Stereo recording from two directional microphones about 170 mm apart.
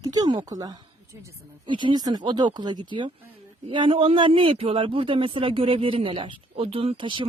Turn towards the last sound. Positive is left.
turn(degrees=-30)  # may be behind; listen again after turning